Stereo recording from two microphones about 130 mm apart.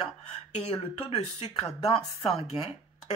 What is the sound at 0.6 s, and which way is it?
Speech, 50° left (ahead or behind).